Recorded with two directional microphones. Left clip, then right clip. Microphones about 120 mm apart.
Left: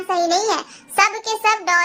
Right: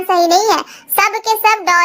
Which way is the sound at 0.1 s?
50° right (ahead or behind).